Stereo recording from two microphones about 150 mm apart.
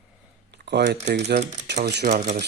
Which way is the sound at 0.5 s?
90° right.